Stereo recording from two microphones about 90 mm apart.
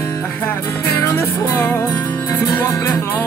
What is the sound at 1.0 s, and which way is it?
Music, 25° left (ahead or behind).